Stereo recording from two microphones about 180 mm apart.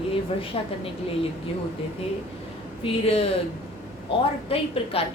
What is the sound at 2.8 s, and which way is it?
A woman's voice, 30° left (ahead or behind).